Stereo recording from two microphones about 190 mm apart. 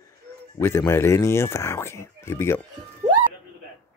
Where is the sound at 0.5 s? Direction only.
15° left (ahead or behind).